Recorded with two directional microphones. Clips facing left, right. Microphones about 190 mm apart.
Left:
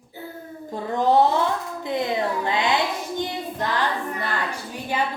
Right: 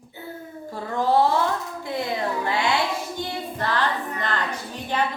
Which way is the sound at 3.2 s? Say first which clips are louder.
Left 2 dB; 15° left (ahead or behind).